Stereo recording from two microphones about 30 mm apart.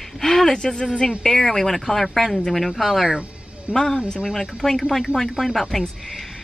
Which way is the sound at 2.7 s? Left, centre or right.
Centre.